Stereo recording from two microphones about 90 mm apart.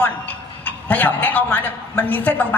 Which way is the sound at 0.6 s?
20° left (ahead or behind).